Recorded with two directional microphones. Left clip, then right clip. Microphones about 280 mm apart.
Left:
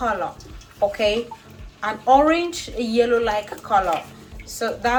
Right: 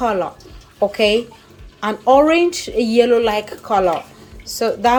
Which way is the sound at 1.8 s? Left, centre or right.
Right.